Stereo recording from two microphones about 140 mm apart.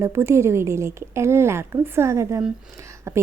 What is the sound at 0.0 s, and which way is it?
A woman's voice, 20° right (ahead or behind).